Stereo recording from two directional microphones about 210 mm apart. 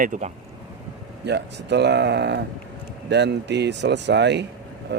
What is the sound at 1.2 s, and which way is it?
Speech, 55° right (ahead or behind).